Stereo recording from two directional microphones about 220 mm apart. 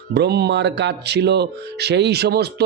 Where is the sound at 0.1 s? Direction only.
50° right (ahead or behind).